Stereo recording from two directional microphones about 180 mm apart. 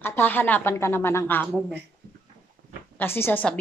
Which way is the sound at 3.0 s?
10° left (ahead or behind).